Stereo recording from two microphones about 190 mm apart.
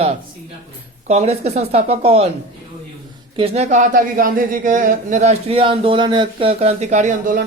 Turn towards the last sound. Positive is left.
turn(degrees=-45)  # may be behind; listen again after turning